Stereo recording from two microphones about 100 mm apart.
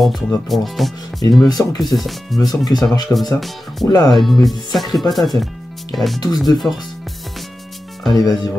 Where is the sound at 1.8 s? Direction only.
Centre (ahead or behind).